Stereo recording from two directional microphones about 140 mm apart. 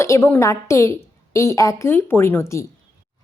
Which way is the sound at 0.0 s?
20° left (ahead or behind).